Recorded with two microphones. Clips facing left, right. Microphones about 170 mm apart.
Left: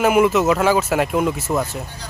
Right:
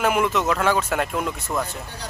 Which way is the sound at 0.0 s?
5° left (ahead or behind).